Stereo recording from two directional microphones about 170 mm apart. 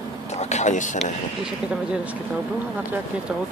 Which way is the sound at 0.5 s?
45° left (ahead or behind).